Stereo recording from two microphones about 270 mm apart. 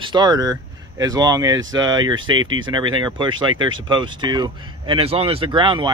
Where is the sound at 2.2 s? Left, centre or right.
Right.